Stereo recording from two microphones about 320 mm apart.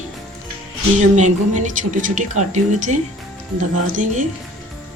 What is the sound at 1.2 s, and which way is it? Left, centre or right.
Speech, right.